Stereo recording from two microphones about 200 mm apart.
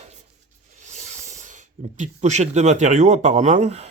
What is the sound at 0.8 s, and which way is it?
Hiss, 35° right (ahead or behind).